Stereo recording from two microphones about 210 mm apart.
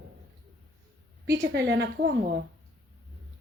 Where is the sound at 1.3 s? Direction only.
55° right (ahead or behind).